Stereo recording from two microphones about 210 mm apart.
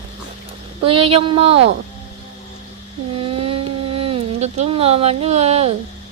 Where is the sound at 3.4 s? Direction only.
25° right (ahead or behind).